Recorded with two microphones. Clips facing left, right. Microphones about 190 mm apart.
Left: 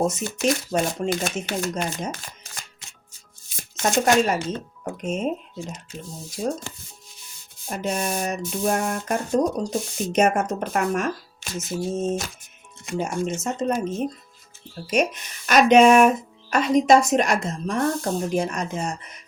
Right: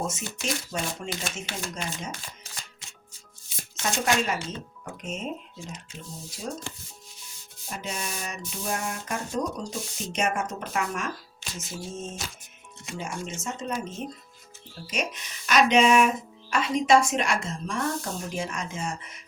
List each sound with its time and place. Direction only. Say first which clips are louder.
0.0 s speech: left 10 dB; 45° left (ahead or behind)
3.8 s speech: left 7 dB; 45° left (ahead or behind)
6.4 s speech: left 9 dB; 50° left (ahead or behind)
7.7 s speech: left 9 dB; 50° left (ahead or behind)
14.8 s speech: left 9 dB; 45° left (ahead or behind)